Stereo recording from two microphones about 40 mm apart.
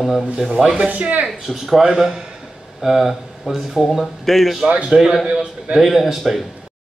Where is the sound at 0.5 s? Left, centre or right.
Centre.